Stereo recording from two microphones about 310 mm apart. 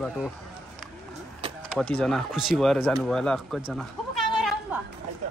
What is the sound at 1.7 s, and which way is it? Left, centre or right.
Speech, centre.